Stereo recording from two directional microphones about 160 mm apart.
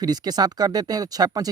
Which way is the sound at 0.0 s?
25° right (ahead or behind).